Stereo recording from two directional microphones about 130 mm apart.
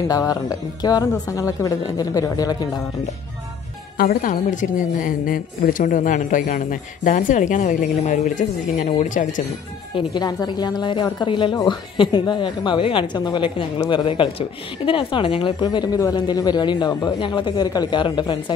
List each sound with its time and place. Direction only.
0.1 s speech: 30° left (ahead or behind)
4.2 s a woman's voice: 85° left
9.9 s a woman's voice: 30° left (ahead or behind)
15.6 s a woman's voice: 30° left (ahead or behind)